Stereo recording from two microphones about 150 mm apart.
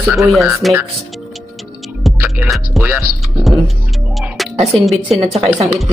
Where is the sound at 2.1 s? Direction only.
Centre (ahead or behind).